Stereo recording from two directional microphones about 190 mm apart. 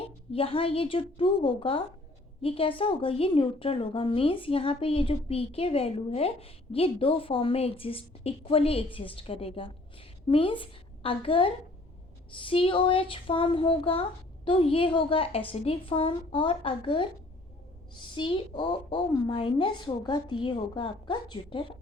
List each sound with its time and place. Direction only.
0.3 s a woman's voice: 30° left (ahead or behind)